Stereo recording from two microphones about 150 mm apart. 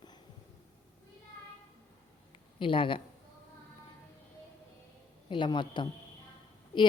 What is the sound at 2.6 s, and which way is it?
Speech, 35° left (ahead or behind).